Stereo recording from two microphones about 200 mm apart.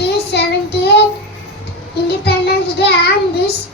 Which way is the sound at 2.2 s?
55° left (ahead or behind).